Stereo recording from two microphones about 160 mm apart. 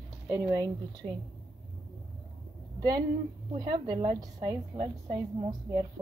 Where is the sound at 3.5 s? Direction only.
30° right (ahead or behind).